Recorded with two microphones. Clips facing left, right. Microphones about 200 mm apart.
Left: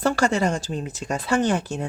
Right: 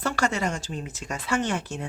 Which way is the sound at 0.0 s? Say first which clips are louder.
Left 5 dB; 35° left (ahead or behind).